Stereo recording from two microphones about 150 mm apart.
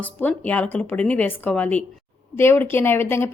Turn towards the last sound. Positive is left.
turn(degrees=15)  # may be behind; listen again after turning